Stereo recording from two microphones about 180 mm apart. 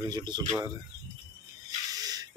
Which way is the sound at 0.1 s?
20° right (ahead or behind).